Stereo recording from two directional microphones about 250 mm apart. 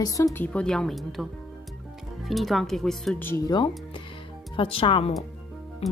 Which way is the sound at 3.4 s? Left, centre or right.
Centre.